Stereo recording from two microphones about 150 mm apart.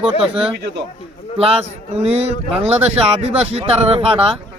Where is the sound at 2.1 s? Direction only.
45° right (ahead or behind).